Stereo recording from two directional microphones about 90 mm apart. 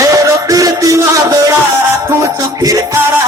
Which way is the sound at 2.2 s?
40° right (ahead or behind).